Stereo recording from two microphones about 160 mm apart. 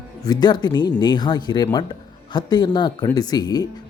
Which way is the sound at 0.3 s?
25° left (ahead or behind).